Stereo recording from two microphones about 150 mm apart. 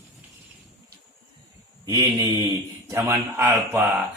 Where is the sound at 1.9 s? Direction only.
25° right (ahead or behind).